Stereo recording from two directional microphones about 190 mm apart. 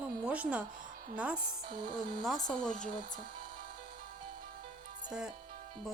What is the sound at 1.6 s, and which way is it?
Speech, 45° right (ahead or behind).